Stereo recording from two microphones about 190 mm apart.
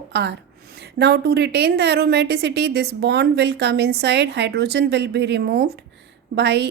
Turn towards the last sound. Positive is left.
turn(degrees=-60)  # may be behind; listen again after turning